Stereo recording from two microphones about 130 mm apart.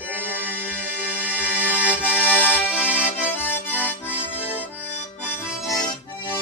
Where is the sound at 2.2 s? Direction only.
15° left (ahead or behind).